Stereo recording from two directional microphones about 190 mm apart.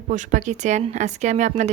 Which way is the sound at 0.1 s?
40° right (ahead or behind).